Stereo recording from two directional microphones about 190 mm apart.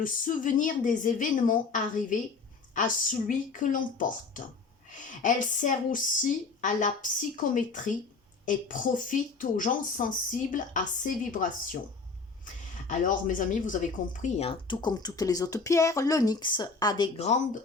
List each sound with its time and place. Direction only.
0.0 s a woman's voice: 45° left (ahead or behind)
12.9 s speech: 40° left (ahead or behind); by 17.1 s 20° left (ahead or behind)
17.2 s speech: 40° left (ahead or behind)